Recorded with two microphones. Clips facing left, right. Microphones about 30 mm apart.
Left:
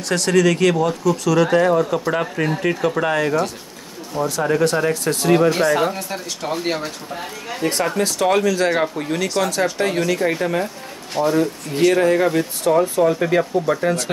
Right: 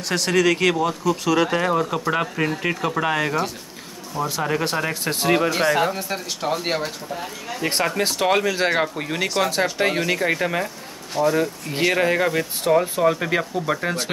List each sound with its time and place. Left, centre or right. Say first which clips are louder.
0.1 s speech: left 3 dB; centre
7.6 s speech: left 2 dB; centre